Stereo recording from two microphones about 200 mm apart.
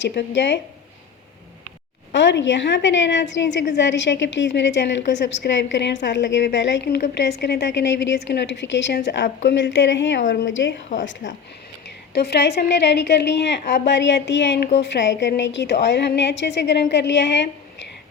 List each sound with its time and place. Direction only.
0.0 s a woman's voice: 60° left (ahead or behind)
2.1 s a woman's voice: 65° left (ahead or behind)
10.2 s a woman's voice: 40° left (ahead or behind)
10.5 s a woman's voice: 65° left (ahead or behind)
12.1 s a woman's voice: 55° left (ahead or behind)